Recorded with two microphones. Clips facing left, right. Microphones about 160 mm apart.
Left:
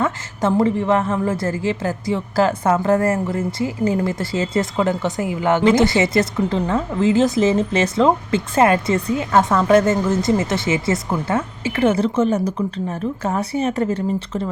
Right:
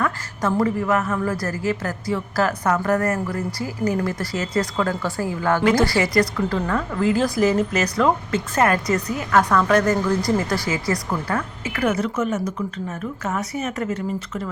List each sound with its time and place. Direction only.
0.0 s a woman's voice: 25° left (ahead or behind)